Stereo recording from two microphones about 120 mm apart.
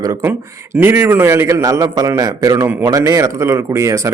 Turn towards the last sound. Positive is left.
turn(degrees=-25)  # may be behind; listen again after turning